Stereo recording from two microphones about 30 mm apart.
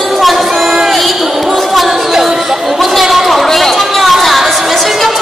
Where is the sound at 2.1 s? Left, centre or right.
Centre.